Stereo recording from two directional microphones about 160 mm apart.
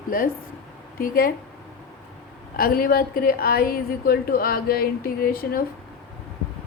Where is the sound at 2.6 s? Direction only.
65° left (ahead or behind).